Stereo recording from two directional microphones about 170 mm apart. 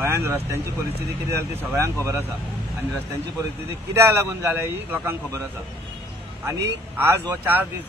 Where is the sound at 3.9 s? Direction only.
15° right (ahead or behind).